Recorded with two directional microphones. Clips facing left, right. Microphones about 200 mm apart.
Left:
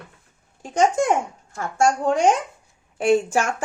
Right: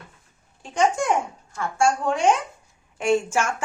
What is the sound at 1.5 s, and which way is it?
Speech, 45° left (ahead or behind).